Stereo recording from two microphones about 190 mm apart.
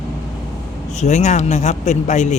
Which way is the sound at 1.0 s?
35° left (ahead or behind).